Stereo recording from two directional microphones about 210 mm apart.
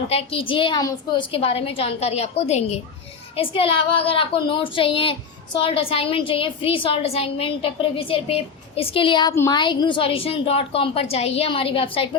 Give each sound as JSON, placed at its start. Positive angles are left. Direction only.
{"t": 0.1, "sound": "a woman's voice", "side_deg": 30}